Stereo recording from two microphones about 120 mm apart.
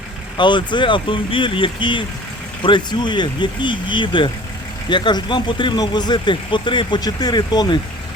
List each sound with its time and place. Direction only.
0.3 s speech: 40° left (ahead or behind)